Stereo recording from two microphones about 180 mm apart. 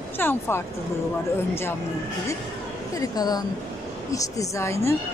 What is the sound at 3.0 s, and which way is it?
Speech, 20° left (ahead or behind).